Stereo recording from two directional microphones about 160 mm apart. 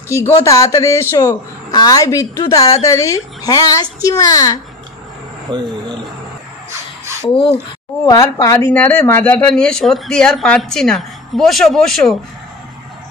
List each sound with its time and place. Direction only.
0.4 s a woman's voice: 20° left (ahead or behind)
5.5 s speech: 30° right (ahead or behind)
8.0 s speech: 20° left (ahead or behind); by 12.2 s 5° left (ahead or behind)